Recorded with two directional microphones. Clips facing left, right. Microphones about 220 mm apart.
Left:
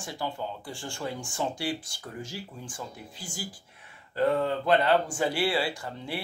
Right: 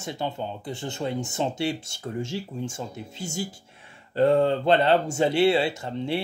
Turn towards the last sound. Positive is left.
turn(degrees=-25)  # may be behind; listen again after turning